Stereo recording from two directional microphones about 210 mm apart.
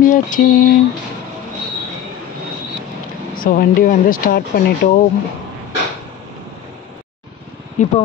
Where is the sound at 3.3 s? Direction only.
40° left (ahead or behind).